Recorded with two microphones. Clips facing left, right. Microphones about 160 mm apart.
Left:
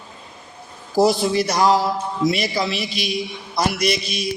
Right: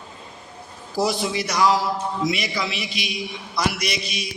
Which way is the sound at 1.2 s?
35° left (ahead or behind).